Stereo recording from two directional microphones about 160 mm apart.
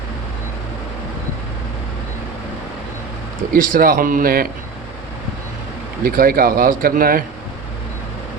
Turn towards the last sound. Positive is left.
turn(degrees=-65)  # may be behind; listen again after turning